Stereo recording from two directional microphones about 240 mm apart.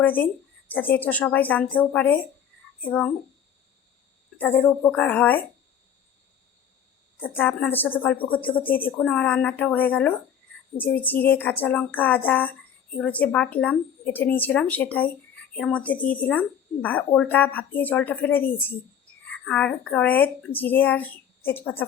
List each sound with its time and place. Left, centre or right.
0.0 s a woman's voice: centre
4.4 s a woman's voice: centre
7.2 s a woman's voice: centre